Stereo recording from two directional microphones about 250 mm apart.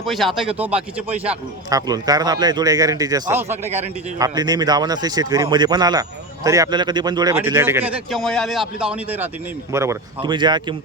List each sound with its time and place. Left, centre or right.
0.0 s speech: centre
3.5 s a man's voice: right
4.2 s speech: centre